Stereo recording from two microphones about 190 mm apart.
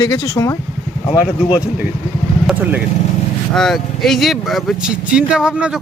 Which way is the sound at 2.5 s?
10° right (ahead or behind).